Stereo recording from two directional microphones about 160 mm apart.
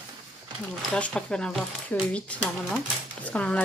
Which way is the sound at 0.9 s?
5° left (ahead or behind).